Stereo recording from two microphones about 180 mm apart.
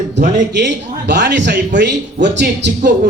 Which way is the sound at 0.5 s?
70° right (ahead or behind).